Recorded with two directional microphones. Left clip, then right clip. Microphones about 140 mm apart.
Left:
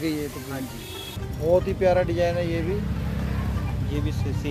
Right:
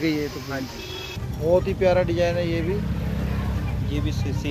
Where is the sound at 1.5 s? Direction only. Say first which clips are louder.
Right 1 dB; 5° left (ahead or behind).